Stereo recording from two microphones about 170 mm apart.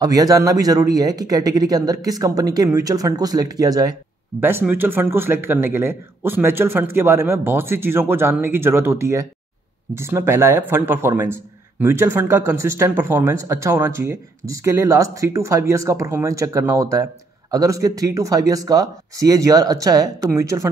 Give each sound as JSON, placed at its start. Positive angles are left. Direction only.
{"t": 0.0, "sound": "a man's voice", "side_deg": -20}